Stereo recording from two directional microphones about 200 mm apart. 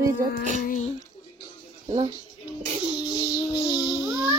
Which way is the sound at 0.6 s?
40° left (ahead or behind).